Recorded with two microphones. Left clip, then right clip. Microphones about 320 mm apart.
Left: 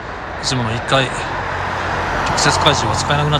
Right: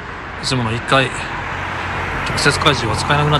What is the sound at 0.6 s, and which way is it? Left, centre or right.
Speech, left.